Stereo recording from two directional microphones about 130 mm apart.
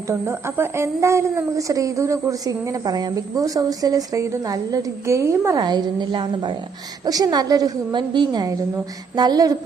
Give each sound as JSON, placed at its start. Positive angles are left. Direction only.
{"t": 0.1, "sound": "a woman's voice", "side_deg": -20}